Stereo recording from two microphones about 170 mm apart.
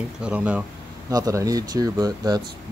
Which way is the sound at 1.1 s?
20° right (ahead or behind).